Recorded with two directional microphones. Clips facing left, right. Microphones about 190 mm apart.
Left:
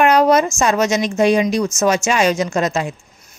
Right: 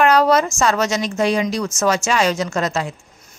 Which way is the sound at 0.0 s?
20° left (ahead or behind).